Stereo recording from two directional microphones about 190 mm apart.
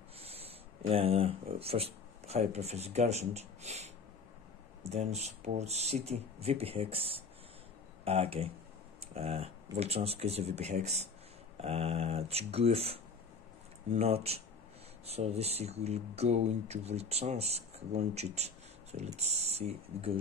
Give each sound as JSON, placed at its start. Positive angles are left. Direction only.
{"t": 0.2, "sound": "speech", "side_deg": -30}